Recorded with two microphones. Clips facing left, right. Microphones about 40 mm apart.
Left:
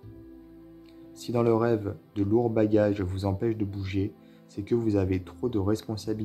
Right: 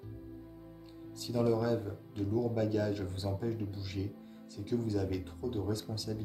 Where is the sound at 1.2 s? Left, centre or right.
Left.